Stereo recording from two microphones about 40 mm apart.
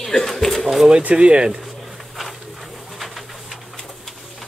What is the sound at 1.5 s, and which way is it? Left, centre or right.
Pigeon, centre.